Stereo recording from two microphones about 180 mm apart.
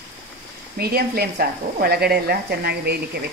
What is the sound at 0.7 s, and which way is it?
Speech, 60° right (ahead or behind).